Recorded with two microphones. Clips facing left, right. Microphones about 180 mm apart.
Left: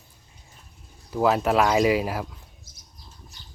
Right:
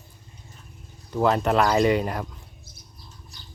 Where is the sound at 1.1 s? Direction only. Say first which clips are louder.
Even; 5° left (ahead or behind).